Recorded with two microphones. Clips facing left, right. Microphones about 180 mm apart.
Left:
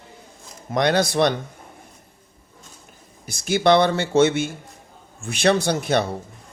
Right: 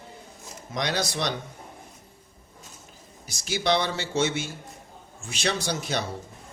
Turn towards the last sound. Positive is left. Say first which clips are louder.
# left 8 dB
turn(degrees=60)  # may be behind; listen again after turning